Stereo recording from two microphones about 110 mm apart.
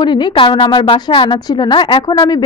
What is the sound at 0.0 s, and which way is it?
A woman's voice, 45° left (ahead or behind).